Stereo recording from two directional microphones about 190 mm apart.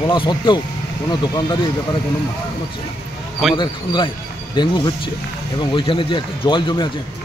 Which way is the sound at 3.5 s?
25° left (ahead or behind).